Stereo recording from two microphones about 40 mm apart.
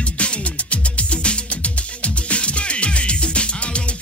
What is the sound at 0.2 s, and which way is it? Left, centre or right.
Music, left.